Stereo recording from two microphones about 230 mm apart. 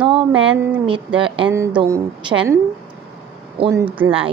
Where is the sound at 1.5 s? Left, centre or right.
Centre.